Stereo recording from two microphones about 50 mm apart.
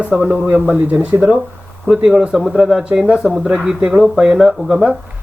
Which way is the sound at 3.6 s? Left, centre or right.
Centre.